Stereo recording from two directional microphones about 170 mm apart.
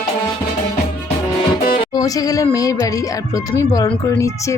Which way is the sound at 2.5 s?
20° left (ahead or behind).